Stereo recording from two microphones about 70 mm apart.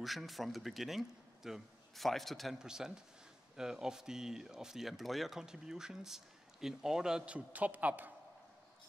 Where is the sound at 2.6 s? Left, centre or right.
Centre.